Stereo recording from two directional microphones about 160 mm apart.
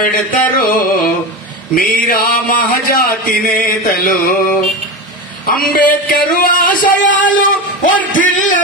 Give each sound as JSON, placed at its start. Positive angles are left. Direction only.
{"t": 0.0, "sound": "a man's voice", "side_deg": 60}